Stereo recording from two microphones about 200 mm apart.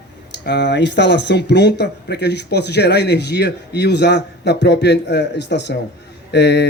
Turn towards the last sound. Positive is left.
turn(degrees=55)  # may be behind; listen again after turning